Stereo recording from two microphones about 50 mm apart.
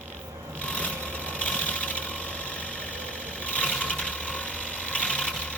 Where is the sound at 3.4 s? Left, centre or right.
Left.